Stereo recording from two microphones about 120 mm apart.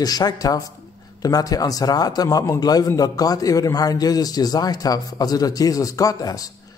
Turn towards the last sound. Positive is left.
turn(degrees=30)  # may be behind; listen again after turning